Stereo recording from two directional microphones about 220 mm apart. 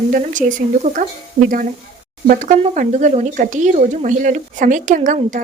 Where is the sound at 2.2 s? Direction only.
35° right (ahead or behind).